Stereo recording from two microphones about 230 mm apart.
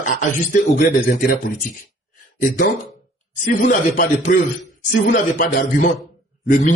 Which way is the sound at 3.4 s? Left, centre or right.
Left.